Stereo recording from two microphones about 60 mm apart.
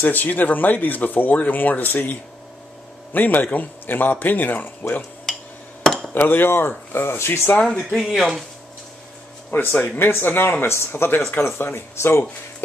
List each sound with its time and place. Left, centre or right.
0.0 s a man's voice: left
6.1 s speech: left
8.0 s speech: centre
9.5 s speech: left